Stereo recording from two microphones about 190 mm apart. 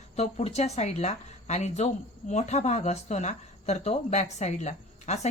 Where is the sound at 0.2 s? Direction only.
35° left (ahead or behind).